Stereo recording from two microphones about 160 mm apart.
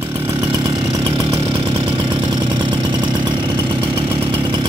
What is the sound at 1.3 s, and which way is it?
Engine, 35° right (ahead or behind).